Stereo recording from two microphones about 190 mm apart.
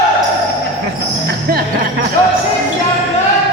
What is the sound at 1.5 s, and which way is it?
Music, 50° right (ahead or behind).